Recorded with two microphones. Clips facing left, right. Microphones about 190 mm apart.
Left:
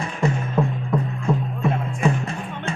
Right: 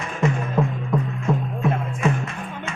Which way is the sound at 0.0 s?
35° left (ahead or behind).